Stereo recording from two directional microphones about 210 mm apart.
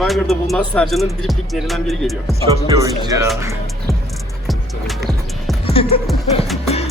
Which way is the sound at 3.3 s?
15° right (ahead or behind).